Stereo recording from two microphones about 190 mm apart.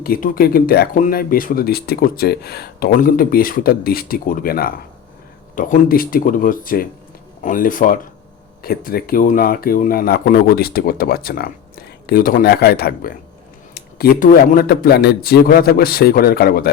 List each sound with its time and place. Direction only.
0.0 s speech: 50° left (ahead or behind)